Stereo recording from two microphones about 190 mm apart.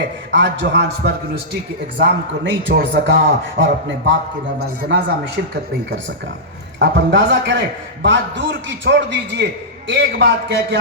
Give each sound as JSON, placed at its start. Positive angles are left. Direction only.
{"t": 0.3, "sound": "a man's voice", "side_deg": -70}
{"t": 6.7, "sound": "a man's voice", "side_deg": -60}